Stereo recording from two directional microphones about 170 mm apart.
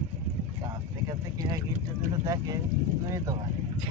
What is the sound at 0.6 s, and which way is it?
Speech, 25° right (ahead or behind).